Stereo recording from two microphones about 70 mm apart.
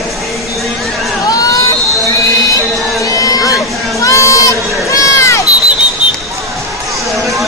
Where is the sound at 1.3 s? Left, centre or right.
Left.